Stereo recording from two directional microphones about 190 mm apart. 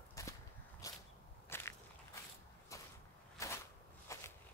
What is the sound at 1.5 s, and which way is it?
Crushing, 10° left (ahead or behind).